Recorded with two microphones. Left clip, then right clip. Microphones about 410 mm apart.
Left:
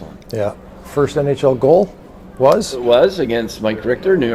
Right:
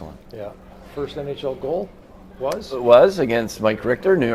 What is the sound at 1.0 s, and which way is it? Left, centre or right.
Speech, left.